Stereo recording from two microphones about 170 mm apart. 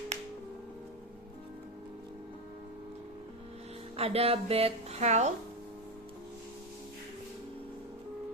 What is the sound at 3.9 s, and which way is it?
A woman's voice, 35° right (ahead or behind).